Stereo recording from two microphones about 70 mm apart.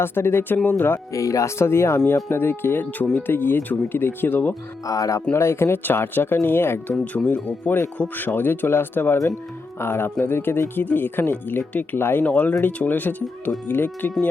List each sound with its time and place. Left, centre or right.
0.0 s speech: left
1.1 s speech: left
4.9 s speech: left
5.3 s speech: left
7.3 s speech: left
12.2 s speech: left